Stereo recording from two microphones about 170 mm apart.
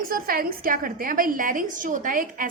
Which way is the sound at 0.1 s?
60° right (ahead or behind).